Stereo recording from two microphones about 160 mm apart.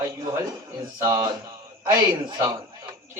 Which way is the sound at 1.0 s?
25° right (ahead or behind).